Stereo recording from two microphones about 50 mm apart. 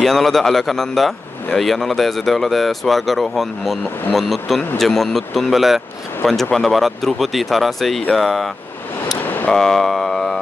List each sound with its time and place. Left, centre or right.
0.0 s a man's voice: centre
9.2 s a sound: left
9.5 s speech: centre